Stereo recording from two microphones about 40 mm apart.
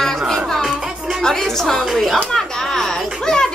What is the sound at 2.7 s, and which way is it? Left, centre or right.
Music, centre.